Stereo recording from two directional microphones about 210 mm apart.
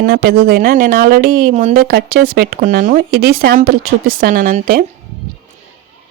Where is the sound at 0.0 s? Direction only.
45° right (ahead or behind).